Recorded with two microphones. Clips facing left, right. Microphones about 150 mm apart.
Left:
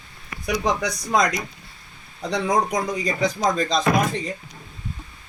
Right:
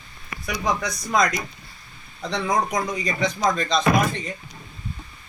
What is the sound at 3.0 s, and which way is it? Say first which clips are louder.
Speech: even; 35° left (ahead or behind).